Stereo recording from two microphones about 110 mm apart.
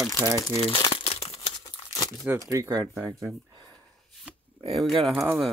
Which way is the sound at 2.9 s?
10° right (ahead or behind).